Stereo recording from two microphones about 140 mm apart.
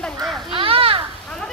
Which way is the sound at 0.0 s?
Centre (ahead or behind).